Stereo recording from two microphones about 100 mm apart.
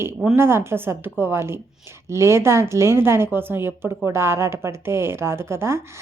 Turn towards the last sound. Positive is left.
turn(degrees=-25)  # may be behind; listen again after turning